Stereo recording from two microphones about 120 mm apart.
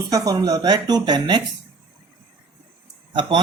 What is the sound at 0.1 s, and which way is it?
Speech, 30° right (ahead or behind).